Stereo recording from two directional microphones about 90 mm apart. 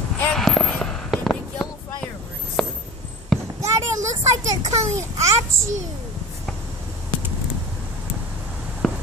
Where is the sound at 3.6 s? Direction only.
35° right (ahead or behind).